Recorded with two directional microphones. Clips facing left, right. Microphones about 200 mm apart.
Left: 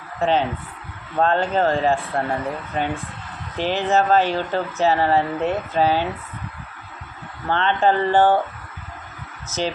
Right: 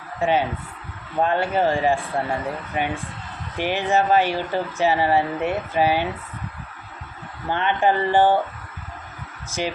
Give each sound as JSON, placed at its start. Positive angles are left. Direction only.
{"t": 0.2, "sound": "speech", "side_deg": -10}
{"t": 7.5, "sound": "speech", "side_deg": -10}
{"t": 9.5, "sound": "speech", "side_deg": -10}